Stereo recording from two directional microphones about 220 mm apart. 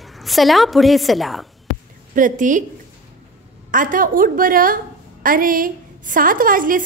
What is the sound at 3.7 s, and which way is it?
A woman's voice, 35° right (ahead or behind).